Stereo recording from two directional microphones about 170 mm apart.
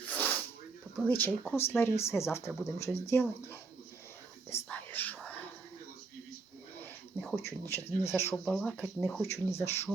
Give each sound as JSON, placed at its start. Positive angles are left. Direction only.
{"t": 0.1, "sound": "a sound", "side_deg": 10}
{"t": 0.9, "sound": "speech", "side_deg": 10}
{"t": 4.4, "sound": "whispering", "side_deg": 10}
{"t": 7.2, "sound": "a sound", "side_deg": 0}
{"t": 7.9, "sound": "speech", "side_deg": 15}
{"t": 9.5, "sound": "speech", "side_deg": 15}